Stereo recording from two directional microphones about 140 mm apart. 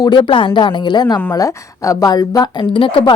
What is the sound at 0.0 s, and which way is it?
A woman's voice, 30° left (ahead or behind).